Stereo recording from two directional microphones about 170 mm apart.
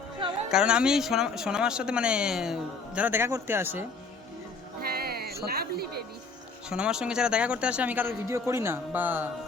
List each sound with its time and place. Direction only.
0.5 s speech: 5° right (ahead or behind)
4.8 s music: 65° right (ahead or behind)
6.7 s speech: 5° right (ahead or behind)